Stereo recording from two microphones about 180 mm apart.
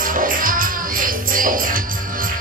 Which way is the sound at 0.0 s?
50° right (ahead or behind).